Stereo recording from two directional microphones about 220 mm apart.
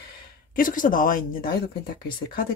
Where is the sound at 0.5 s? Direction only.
40° left (ahead or behind).